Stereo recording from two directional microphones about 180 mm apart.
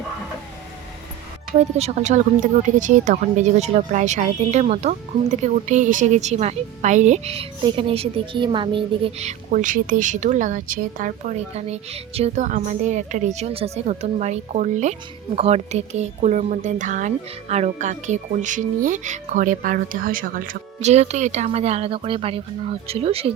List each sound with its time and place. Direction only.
1.5 s speech: 40° right (ahead or behind)